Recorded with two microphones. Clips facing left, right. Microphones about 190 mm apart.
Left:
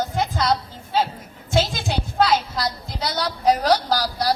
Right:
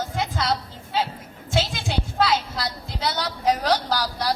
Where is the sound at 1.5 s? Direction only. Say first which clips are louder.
Left 3 dB; 40° left (ahead or behind).